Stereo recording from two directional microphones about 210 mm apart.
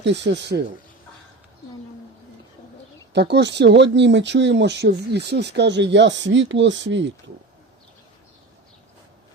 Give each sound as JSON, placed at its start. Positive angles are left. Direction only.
{"t": 0.0, "sound": "speech", "side_deg": -55}
{"t": 3.1, "sound": "speech", "side_deg": -55}